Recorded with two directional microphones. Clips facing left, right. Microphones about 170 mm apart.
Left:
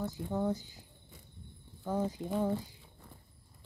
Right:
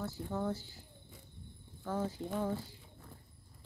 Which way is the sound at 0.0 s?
15° left (ahead or behind).